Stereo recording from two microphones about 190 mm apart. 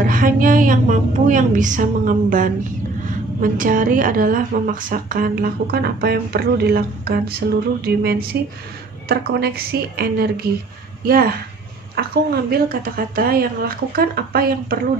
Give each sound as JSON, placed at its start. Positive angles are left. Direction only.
{"t": 0.0, "sound": "a woman's voice", "side_deg": -45}
{"t": 7.8, "sound": "a sound", "side_deg": -55}
{"t": 11.1, "sound": "a woman's voice", "side_deg": -55}